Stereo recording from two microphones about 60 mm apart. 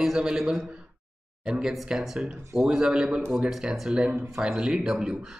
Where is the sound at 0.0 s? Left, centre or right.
Centre.